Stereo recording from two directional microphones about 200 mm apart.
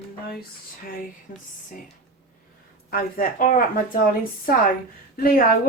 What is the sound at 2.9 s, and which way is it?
A woman's voice, 45° left (ahead or behind).